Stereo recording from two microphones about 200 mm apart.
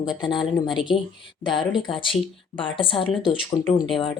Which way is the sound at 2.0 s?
25° left (ahead or behind).